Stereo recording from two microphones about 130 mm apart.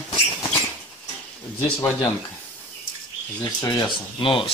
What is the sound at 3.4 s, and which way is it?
Speech, 35° left (ahead or behind).